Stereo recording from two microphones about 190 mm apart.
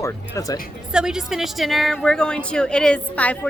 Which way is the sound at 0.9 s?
5° right (ahead or behind).